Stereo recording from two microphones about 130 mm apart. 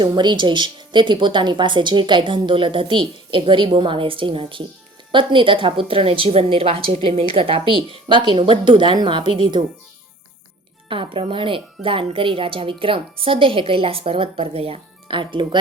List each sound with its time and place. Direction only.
0.0 s speech: 35° right (ahead or behind)
10.8 s speech: 40° right (ahead or behind)